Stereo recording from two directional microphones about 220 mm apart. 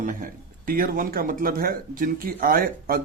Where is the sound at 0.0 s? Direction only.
35° right (ahead or behind).